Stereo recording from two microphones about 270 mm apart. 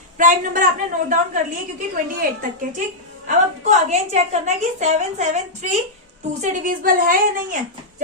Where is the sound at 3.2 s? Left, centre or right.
Right.